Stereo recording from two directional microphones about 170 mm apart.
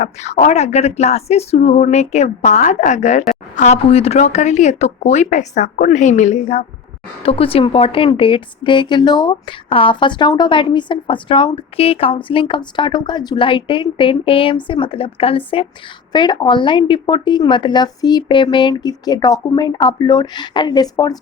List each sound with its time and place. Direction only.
0.0 s a woman's voice: 45° left (ahead or behind); by 21.2 s 20° left (ahead or behind)